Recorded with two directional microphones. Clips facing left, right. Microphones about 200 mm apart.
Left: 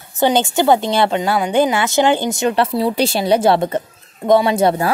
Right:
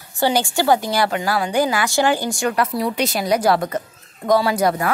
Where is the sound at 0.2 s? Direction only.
20° left (ahead or behind).